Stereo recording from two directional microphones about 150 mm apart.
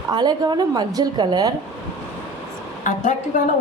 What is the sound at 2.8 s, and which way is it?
Speech, 55° left (ahead or behind).